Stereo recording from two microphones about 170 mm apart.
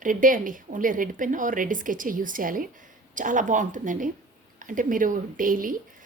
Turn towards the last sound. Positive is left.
turn(degrees=-55)  # may be behind; listen again after turning